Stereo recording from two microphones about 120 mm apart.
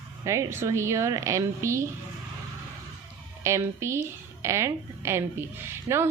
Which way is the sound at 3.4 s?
25° right (ahead or behind).